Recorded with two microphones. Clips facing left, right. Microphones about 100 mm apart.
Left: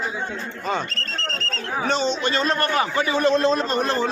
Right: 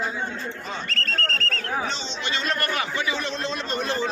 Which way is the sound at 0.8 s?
20° left (ahead or behind).